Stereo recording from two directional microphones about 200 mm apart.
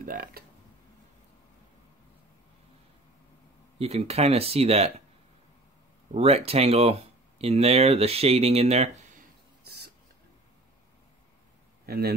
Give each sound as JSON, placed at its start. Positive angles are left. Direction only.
{"t": 0.0, "sound": "speech", "side_deg": -45}
{"t": 3.7, "sound": "speech", "side_deg": -30}
{"t": 6.1, "sound": "speech", "side_deg": -30}
{"t": 11.8, "sound": "a sound", "side_deg": -50}